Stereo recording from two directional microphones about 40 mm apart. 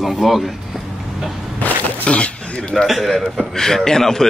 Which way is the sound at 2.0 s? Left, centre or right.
Left.